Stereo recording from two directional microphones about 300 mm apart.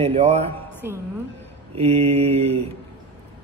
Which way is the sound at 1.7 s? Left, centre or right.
Right.